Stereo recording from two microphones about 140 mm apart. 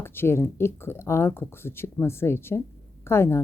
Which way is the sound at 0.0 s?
15° left (ahead or behind).